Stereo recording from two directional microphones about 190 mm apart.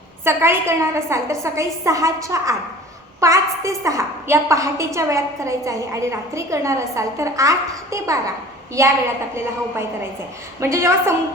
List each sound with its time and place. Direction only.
0.3 s a woman's voice: 15° right (ahead or behind)